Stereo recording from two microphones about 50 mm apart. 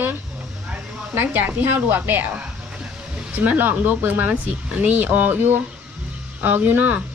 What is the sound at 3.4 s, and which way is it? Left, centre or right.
Speech, right.